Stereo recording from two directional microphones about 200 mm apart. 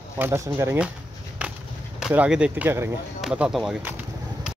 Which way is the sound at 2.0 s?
5° right (ahead or behind).